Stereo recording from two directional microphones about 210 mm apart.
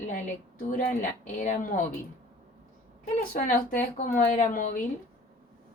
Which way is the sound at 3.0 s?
40° left (ahead or behind).